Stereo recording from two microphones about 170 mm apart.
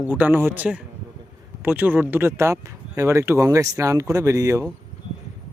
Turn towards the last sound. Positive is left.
turn(degrees=-20)  # may be behind; listen again after turning